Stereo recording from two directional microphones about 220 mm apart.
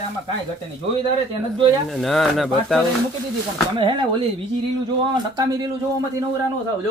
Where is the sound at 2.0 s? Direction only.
Centre (ahead or behind).